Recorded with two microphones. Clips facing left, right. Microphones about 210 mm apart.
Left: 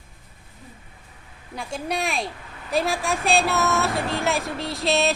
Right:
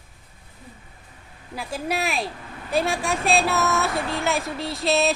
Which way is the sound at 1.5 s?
5° right (ahead or behind).